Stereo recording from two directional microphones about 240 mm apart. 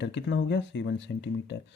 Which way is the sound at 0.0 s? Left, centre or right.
Left.